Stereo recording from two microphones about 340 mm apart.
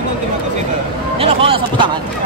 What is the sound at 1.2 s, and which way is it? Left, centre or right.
Speech, centre.